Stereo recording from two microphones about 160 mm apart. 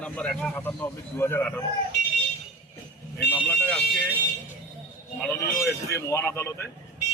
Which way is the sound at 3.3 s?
10° left (ahead or behind).